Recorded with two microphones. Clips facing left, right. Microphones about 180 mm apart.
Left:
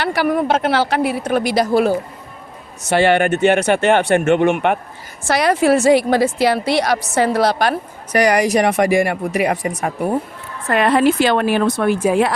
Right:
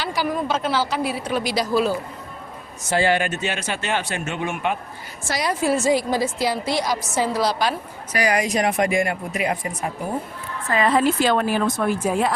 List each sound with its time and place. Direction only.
0.0 s a woman's voice: 65° left (ahead or behind)
2.8 s a woman's voice: 70° left (ahead or behind)